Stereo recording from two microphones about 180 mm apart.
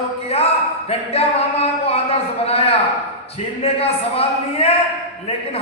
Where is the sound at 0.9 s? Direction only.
35° left (ahead or behind).